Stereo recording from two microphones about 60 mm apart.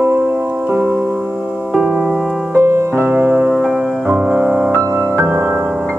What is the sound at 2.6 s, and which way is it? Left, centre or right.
Music, right.